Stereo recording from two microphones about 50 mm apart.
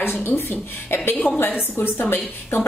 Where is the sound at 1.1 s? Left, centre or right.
Left.